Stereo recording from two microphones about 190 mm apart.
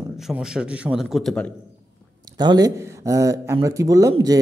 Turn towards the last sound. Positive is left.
turn(degrees=-15)  # may be behind; listen again after turning